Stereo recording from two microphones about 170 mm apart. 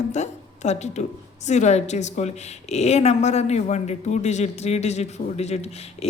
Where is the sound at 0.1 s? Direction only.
40° left (ahead or behind).